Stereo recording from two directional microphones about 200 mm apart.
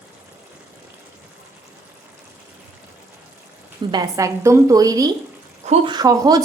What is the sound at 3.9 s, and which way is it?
A woman's voice, 20° right (ahead or behind).